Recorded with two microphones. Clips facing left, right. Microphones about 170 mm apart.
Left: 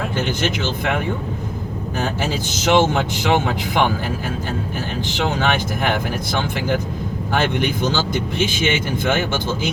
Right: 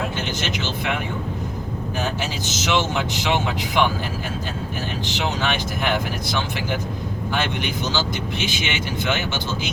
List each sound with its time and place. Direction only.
0.2 s speech: 50° left (ahead or behind)
2.0 s speech: 55° left (ahead or behind)
5.0 s speech: 50° left (ahead or behind)